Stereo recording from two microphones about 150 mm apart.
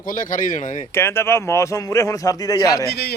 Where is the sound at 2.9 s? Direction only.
90° left.